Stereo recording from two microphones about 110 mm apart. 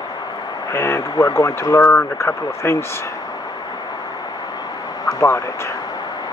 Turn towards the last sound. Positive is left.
turn(degrees=25)  # may be behind; listen again after turning